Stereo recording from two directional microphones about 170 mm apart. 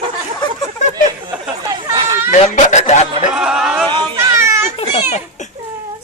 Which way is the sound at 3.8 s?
30° right (ahead or behind).